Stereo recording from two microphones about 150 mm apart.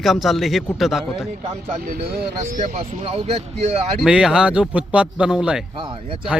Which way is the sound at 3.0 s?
45° right (ahead or behind).